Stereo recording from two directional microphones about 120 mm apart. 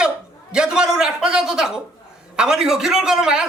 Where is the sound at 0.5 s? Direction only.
5° right (ahead or behind).